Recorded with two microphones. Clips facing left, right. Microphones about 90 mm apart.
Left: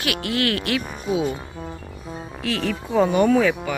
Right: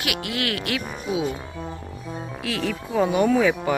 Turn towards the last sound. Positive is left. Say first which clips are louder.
# left 2 dB
turn(degrees=-10)  # may be behind; listen again after turning